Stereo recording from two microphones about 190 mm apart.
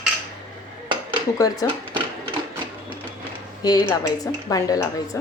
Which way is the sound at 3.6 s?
20° left (ahead or behind).